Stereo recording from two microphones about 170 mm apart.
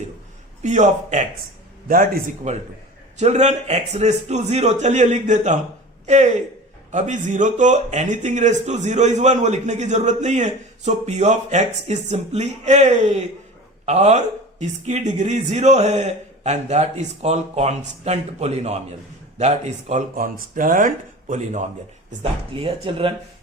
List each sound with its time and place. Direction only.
0.6 s speech: 45° right (ahead or behind)
1.9 s a man's voice: 55° right (ahead or behind)
22.2 s speech: 35° right (ahead or behind)